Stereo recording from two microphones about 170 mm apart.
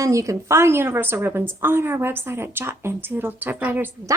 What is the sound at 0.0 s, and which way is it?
A woman's voice, 20° right (ahead or behind).